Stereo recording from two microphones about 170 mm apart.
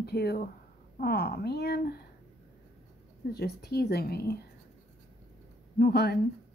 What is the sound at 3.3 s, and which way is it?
Speech, 70° left (ahead or behind).